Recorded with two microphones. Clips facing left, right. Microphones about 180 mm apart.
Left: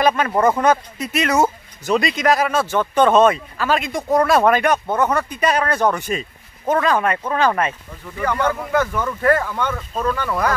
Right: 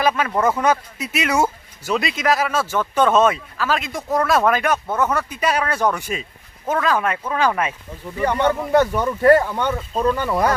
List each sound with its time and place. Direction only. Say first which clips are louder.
0.0 s speech: left 2 dB; 5° right (ahead or behind)
0.3 s speech: left 3 dB; 10° left (ahead or behind)
0.6 s speech: left 2 dB; 5° right (ahead or behind)
8.2 s speech: right 2 dB; 25° right (ahead or behind)